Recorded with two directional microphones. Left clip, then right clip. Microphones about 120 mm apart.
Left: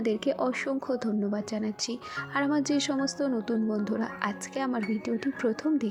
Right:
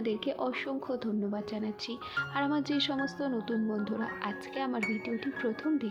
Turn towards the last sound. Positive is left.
turn(degrees=45)  # may be behind; listen again after turning